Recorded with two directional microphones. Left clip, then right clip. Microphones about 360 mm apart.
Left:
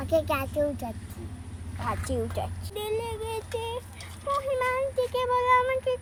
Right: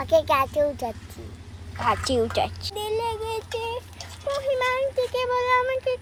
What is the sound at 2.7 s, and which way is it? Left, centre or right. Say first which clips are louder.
Child singing: right 4 dB; centre.